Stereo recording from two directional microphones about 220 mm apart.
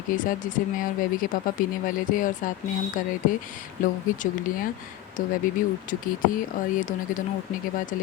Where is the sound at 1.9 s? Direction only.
35° left (ahead or behind).